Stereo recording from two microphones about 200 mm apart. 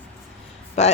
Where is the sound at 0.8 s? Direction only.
35° left (ahead or behind).